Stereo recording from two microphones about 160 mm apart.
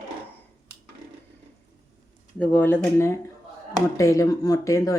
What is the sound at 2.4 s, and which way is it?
Speech, 10° left (ahead or behind).